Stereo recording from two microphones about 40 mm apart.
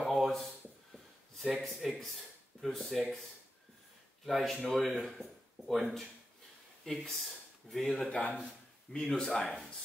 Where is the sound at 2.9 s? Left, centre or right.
Centre.